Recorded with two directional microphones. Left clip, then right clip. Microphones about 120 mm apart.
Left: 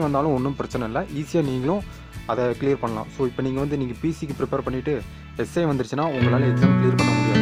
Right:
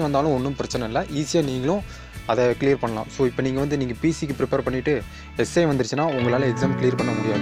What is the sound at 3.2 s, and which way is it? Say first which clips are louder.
Speech: right 3 dB; 20° right (ahead or behind).